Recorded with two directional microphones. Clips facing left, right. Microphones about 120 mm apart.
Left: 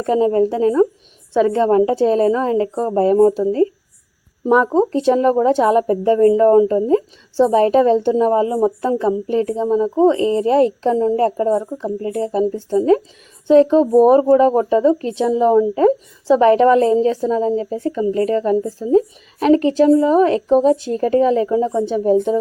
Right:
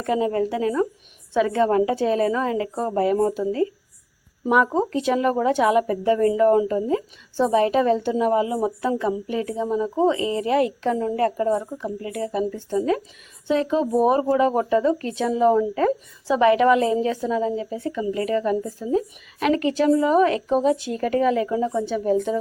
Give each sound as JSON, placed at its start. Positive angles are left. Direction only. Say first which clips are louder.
{"t": 0.0, "sound": "a woman's voice", "louder": "left 7 dB", "side_deg": 30}
{"t": 16.2, "sound": "a woman's voice", "louder": "left 5 dB", "side_deg": 35}